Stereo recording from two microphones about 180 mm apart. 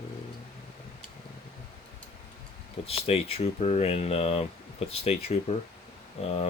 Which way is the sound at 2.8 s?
35° left (ahead or behind).